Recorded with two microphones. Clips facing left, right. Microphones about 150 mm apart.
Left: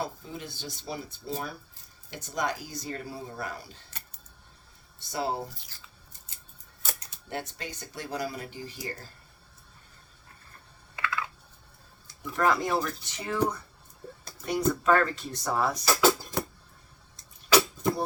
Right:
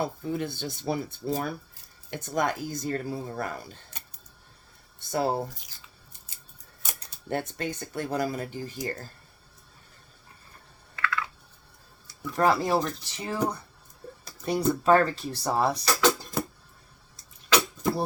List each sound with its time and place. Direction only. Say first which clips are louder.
0.0 s speech: right 6 dB; 55° right (ahead or behind)
4.9 s speech: right 4 dB; 50° right (ahead or behind)
7.3 s speech: right 6 dB; 55° right (ahead or behind)
10.9 s computer keyboard: right 2 dB; 20° left (ahead or behind)
12.4 s speech: right 3 dB; 30° right (ahead or behind)
15.8 s a sound: left 1 dB; 5° left (ahead or behind)